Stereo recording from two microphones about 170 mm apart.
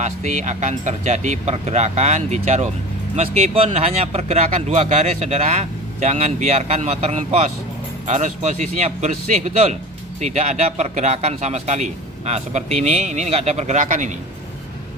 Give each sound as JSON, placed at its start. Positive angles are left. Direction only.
{"t": 0.0, "sound": "a man's voice", "side_deg": -45}